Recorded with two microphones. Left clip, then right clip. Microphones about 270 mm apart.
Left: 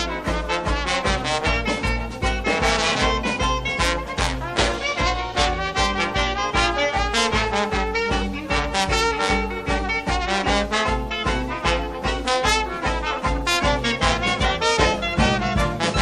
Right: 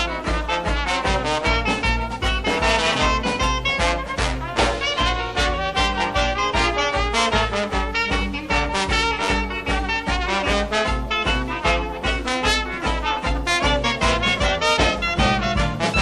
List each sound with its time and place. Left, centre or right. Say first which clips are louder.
0.5 s music: right 1 dB; left
10.3 s music: even; left
14.6 s music: even; centre